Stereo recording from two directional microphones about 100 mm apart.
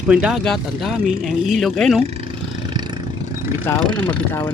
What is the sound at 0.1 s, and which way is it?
Speech, 10° right (ahead or behind).